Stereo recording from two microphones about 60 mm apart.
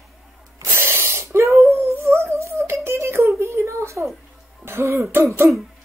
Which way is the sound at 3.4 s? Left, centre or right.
Right.